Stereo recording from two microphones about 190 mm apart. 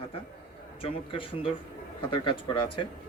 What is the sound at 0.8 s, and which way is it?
A man's voice, 30° left (ahead or behind).